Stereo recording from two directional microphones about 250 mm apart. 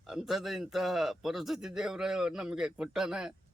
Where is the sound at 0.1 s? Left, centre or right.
Centre.